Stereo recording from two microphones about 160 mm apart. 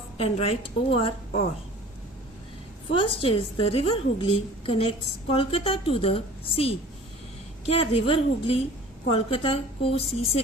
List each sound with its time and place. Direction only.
0.2 s a woman's voice: 35° left (ahead or behind)
2.9 s a woman's voice: 35° left (ahead or behind)